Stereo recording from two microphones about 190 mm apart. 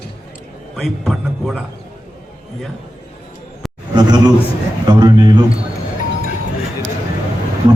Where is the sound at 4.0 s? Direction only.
20° right (ahead or behind).